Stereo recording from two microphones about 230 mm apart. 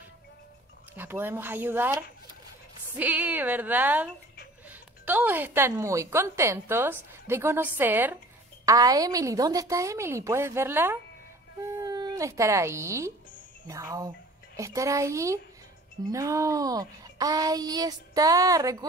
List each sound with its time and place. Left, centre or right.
0.9 s a woman's voice: centre